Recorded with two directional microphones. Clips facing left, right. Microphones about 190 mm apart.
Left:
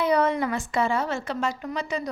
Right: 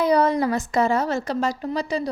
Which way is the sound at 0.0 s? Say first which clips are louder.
Right 3 dB; 35° right (ahead or behind).